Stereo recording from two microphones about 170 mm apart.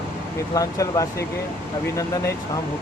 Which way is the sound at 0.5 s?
20° left (ahead or behind).